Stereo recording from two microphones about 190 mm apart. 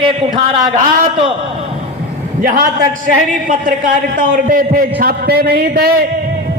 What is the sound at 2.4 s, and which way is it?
A man's voice, 45° right (ahead or behind).